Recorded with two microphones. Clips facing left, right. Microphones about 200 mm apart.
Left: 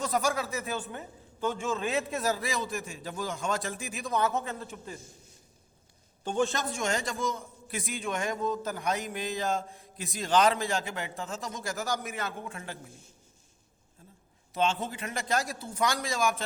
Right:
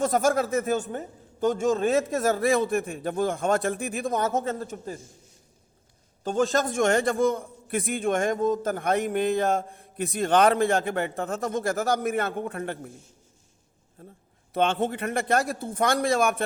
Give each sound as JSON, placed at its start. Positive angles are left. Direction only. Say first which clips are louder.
{"t": 0.0, "sound": "a man's voice", "louder": "right 7 dB", "side_deg": -50}
{"t": 4.1, "sound": "a man's voice", "louder": "right 1 dB", "side_deg": -45}
{"t": 6.2, "sound": "a man's voice", "louder": "right 5 dB", "side_deg": -35}
{"t": 6.7, "sound": "a man's voice", "louder": "right 9 dB", "side_deg": -55}
{"t": 14.0, "sound": "a man's voice", "louder": "right 9 dB", "side_deg": -60}